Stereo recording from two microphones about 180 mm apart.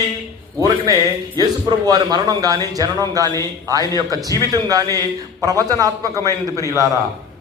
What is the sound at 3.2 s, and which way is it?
Speech, 20° left (ahead or behind).